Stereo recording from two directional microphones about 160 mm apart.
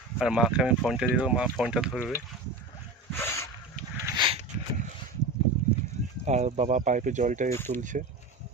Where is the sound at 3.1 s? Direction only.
15° left (ahead or behind).